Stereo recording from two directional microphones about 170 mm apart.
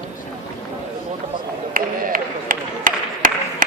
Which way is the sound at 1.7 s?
55° right (ahead or behind).